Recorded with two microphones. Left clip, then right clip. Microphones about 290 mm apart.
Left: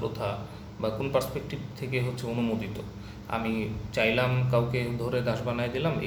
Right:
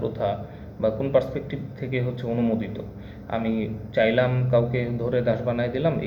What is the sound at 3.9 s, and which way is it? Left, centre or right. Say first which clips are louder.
A man's voice: right 5 dB; centre.